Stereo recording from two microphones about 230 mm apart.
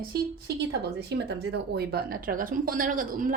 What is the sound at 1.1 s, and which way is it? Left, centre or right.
A woman's voice, right.